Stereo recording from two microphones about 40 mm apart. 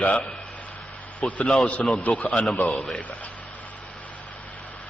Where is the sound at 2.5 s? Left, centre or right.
Left.